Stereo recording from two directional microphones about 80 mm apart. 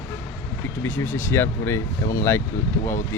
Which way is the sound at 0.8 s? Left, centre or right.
Left.